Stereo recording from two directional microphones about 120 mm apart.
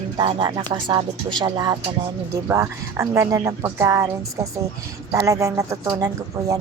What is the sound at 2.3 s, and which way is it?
Speech, 25° right (ahead or behind).